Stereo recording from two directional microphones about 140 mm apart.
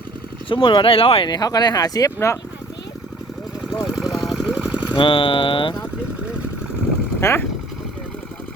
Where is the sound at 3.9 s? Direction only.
5° right (ahead or behind).